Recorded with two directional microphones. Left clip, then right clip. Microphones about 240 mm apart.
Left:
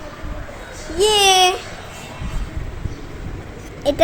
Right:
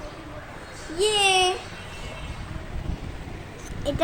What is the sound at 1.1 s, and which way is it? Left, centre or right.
Speech, left.